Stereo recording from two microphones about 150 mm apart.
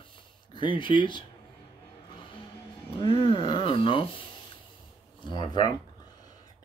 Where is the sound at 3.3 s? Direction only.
35° left (ahead or behind).